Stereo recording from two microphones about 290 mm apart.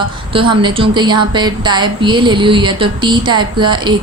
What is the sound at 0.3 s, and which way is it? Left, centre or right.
A woman's voice, centre.